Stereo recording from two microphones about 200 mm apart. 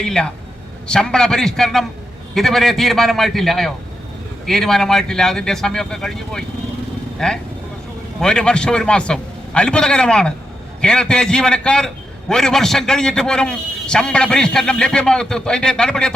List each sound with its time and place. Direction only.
0.0 s a man's voice: 5° left (ahead or behind)